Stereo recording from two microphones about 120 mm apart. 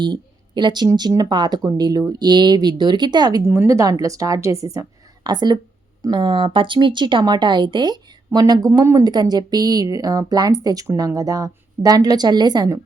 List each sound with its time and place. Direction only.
0.0 s speech: 40° right (ahead or behind)
3.4 s a woman's voice: 20° right (ahead or behind)